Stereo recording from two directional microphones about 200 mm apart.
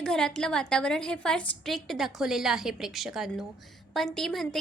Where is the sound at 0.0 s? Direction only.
5° left (ahead or behind).